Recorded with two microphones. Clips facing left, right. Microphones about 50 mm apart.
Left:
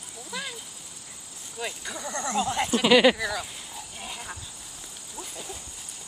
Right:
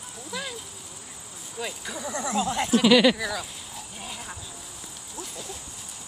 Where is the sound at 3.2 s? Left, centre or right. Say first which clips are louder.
Even; centre.